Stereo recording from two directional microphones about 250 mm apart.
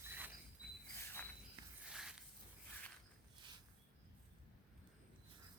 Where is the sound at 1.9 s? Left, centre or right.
Centre.